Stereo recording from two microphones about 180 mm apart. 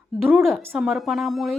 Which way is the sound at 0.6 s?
10° right (ahead or behind).